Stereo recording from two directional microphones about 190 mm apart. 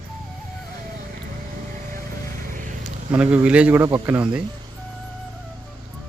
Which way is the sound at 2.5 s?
45° right (ahead or behind).